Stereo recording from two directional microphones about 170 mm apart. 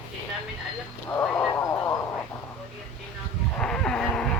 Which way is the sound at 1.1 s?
10° left (ahead or behind).